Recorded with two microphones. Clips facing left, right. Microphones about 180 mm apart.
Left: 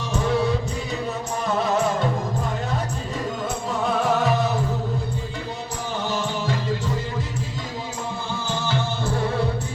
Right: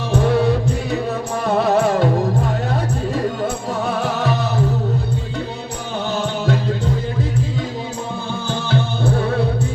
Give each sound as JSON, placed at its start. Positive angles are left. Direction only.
{"t": 0.1, "sound": "music", "side_deg": -60}
{"t": 4.0, "sound": "music", "side_deg": -70}
{"t": 6.1, "sound": "music", "side_deg": -65}
{"t": 8.4, "sound": "music", "side_deg": -60}